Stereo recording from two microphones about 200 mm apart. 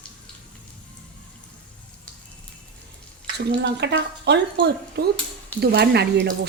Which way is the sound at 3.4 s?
60° right (ahead or behind).